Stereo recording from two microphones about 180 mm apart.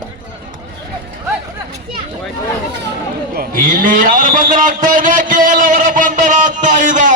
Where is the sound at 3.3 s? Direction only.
55° right (ahead or behind).